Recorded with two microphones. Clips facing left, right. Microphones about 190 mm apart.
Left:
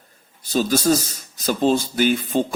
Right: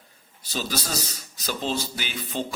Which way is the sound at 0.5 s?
50° left (ahead or behind).